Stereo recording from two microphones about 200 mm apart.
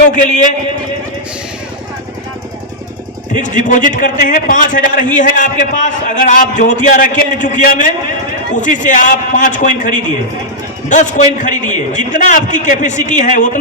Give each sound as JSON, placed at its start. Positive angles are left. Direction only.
{"t": 3.3, "sound": "a man's voice", "side_deg": 40}